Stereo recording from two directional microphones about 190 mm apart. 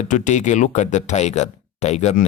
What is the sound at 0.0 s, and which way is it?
Speech, 40° left (ahead or behind).